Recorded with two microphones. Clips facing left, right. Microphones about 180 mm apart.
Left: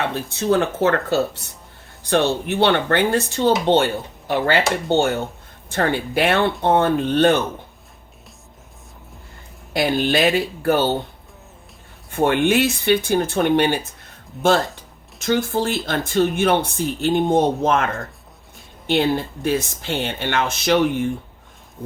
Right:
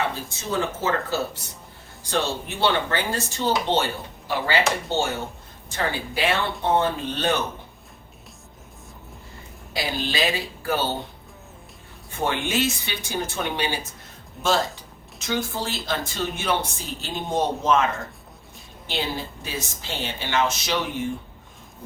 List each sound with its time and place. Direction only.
0.1 s speech: 65° left (ahead or behind)
9.7 s speech: 55° left (ahead or behind)
12.1 s speech: 60° left (ahead or behind)
15.3 s speech: 55° left (ahead or behind)